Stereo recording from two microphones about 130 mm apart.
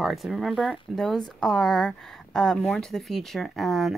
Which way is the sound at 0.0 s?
Centre (ahead or behind).